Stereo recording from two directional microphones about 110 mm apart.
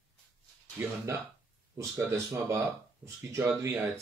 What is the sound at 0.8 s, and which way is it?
Speech, 20° right (ahead or behind).